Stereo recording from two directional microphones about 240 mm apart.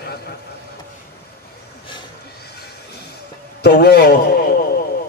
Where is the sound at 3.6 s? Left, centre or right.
Left.